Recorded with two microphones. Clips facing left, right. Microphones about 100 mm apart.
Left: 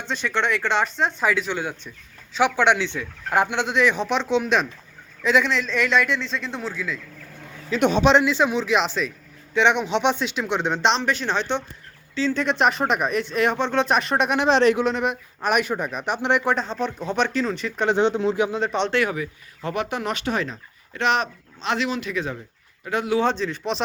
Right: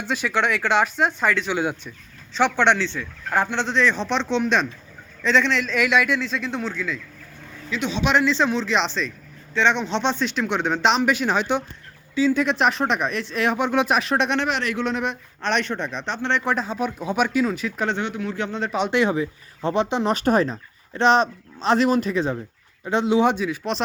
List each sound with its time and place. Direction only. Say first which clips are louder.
0.1 s a man's voice: right 1 dB; 5° right (ahead or behind)
7.8 s speech: left 7 dB; 50° left (ahead or behind)
8.2 s speech: even; 10° left (ahead or behind)
10.2 s a man's voice: right 1 dB; centre (ahead or behind)
14.4 s speech: left 8 dB; 30° left (ahead or behind)
14.8 s speech: left 2 dB; centre (ahead or behind)
16.4 s a man's voice: even; centre (ahead or behind)
17.9 s speech: left 7 dB; 25° left (ahead or behind)
18.3 s speech: left 5 dB; 10° left (ahead or behind)
18.6 s a man's voice: left 1 dB; 5° right (ahead or behind)
18.9 s speech: right 3 dB; 25° right (ahead or behind)
20.1 s speech: right 6 dB; 40° right (ahead or behind)
22.1 s speech: right 4 dB; 30° right (ahead or behind); by 23.8 s 5° right (ahead or behind)